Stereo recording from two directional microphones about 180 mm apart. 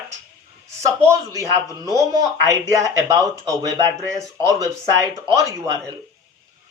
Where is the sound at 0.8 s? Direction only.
15° right (ahead or behind).